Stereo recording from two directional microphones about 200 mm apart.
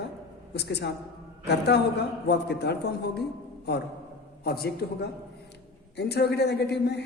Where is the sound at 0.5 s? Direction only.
55° left (ahead or behind).